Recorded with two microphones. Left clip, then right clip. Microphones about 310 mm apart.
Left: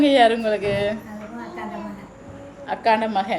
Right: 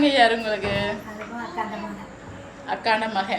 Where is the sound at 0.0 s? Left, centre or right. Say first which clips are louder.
Left 2 dB; left.